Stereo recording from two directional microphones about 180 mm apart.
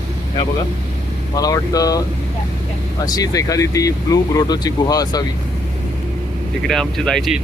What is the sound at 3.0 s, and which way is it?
Speech, 20° left (ahead or behind).